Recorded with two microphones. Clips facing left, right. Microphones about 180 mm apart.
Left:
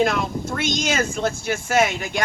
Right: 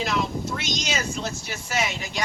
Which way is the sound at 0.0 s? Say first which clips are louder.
Left 5 dB; 50° left (ahead or behind).